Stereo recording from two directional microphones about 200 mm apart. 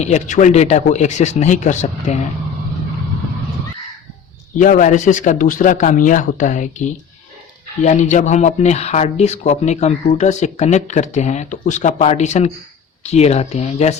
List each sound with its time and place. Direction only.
0.0 s speech: 35° left (ahead or behind)
4.5 s speech: 40° left (ahead or behind)